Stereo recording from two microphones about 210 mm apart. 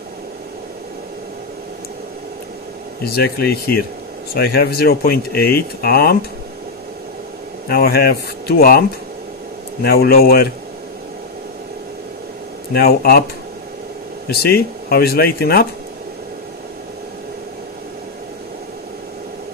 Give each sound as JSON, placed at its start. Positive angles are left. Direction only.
{"t": 3.1, "sound": "speech", "side_deg": 50}
{"t": 7.7, "sound": "speech", "side_deg": 50}
{"t": 12.7, "sound": "speech", "side_deg": 45}
{"t": 14.3, "sound": "speech", "side_deg": 45}